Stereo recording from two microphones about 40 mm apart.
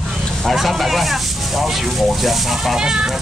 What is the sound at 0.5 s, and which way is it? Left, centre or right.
Speech, centre.